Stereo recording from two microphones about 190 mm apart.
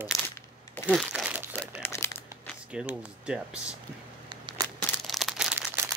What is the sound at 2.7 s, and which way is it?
Speech, 5° right (ahead or behind).